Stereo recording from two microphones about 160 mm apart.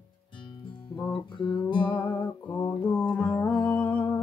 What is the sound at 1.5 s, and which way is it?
Music, 30° left (ahead or behind).